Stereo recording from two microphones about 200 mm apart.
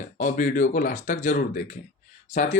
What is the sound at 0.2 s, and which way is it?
Speech, 40° left (ahead or behind).